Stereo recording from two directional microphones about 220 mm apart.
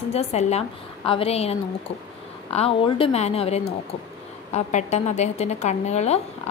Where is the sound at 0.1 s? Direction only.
30° left (ahead or behind).